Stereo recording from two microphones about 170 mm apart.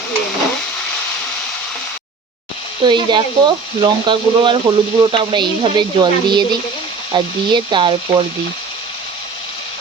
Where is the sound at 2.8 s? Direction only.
25° right (ahead or behind).